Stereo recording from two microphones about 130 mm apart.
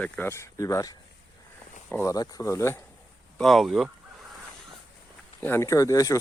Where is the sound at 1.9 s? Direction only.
25° left (ahead or behind).